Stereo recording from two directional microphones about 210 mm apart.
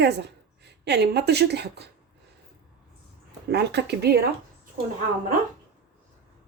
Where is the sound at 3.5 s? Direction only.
55° right (ahead or behind).